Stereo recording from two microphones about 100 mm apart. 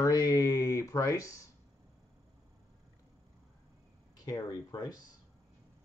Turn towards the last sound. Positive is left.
turn(degrees=40)  # may be behind; listen again after turning